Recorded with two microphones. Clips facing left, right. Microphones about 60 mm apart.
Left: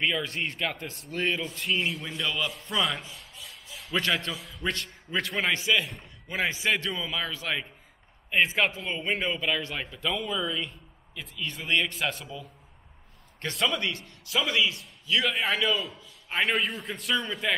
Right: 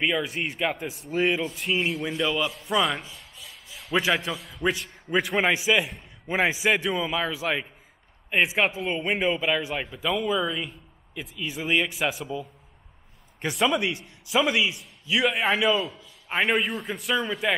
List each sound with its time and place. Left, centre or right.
0.0 s a man's voice: centre
2.5 s a sound: centre
3.9 s a man's voice: centre
13.4 s a man's voice: centre